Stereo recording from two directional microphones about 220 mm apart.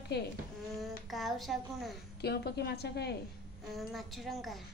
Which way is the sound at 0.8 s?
Centre (ahead or behind).